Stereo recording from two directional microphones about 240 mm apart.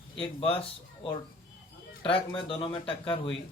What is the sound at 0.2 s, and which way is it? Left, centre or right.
Speech, left.